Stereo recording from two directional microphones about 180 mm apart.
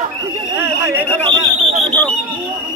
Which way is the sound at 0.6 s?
10° right (ahead or behind).